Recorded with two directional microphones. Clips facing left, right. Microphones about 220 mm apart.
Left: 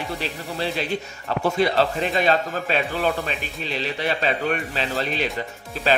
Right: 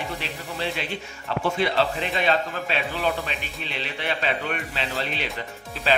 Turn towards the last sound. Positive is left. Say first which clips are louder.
# left 2 dB
turn(degrees=45)  # may be behind; listen again after turning